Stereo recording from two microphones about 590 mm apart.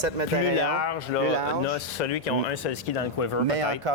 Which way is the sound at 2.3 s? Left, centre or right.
Left.